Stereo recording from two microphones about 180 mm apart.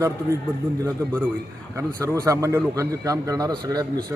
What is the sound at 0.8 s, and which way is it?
A man's voice, 15° right (ahead or behind).